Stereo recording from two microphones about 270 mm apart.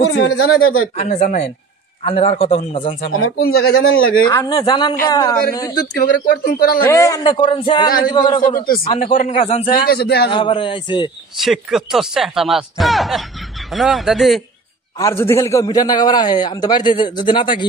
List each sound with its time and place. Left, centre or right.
0.2 s speech: left
0.9 s a man's voice: left
3.1 s speech: left
3.3 s speech: left
3.6 s speech: left
4.1 s a man's voice: centre
5.8 s speech: left
6.9 s a man's voice: centre
8.5 s a man's voice: left
9.8 s speech: left
10.3 s a man's voice: centre
11.3 s speech: centre
15.0 s a man's voice: centre